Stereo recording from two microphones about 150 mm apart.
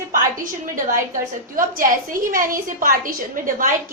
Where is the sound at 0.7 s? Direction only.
65° right (ahead or behind).